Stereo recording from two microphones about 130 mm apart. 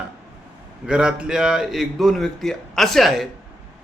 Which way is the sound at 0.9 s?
5° right (ahead or behind).